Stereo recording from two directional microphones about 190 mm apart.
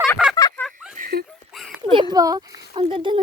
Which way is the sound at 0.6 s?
Centre (ahead or behind).